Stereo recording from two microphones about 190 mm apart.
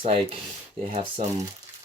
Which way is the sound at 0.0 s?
30° right (ahead or behind).